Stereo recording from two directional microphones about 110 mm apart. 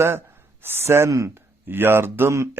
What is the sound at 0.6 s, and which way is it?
Speech, 20° right (ahead or behind).